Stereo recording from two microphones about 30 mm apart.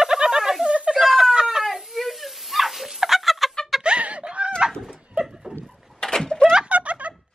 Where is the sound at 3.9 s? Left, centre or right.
Right.